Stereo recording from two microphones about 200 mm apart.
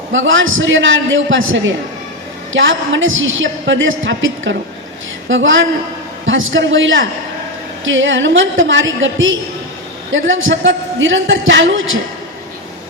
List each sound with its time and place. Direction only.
0.1 s a woman's voice: 70° right (ahead or behind)